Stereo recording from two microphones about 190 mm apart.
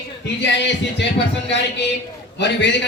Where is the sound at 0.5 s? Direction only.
65° left (ahead or behind).